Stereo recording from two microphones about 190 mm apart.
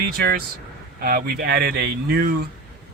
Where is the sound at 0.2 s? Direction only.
50° right (ahead or behind).